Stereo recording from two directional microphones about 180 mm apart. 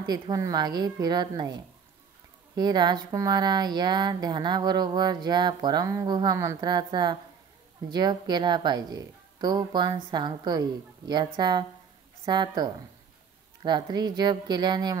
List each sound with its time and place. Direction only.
0.0 s speech: 20° right (ahead or behind)